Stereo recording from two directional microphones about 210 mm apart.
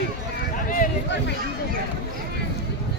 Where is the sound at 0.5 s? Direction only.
40° left (ahead or behind).